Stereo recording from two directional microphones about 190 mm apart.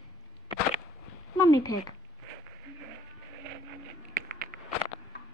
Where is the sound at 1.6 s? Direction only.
20° left (ahead or behind).